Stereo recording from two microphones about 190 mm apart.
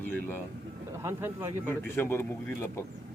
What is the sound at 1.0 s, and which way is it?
Speech, 15° right (ahead or behind).